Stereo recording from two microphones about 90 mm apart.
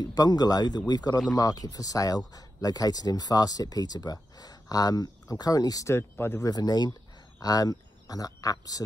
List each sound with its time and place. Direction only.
0.0 s speech: 50° left (ahead or behind)
5.9 s speech: 25° left (ahead or behind)
6.4 s speech: 45° left (ahead or behind)